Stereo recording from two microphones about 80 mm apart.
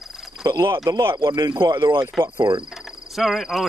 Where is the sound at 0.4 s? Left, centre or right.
Right.